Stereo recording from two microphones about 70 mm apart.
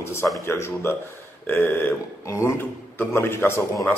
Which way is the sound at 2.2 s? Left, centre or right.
Left.